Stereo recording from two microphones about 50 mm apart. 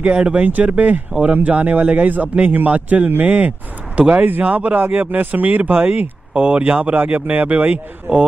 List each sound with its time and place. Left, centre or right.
0.0 s a man's voice: right
4.7 s speech: right
6.3 s a man's voice: right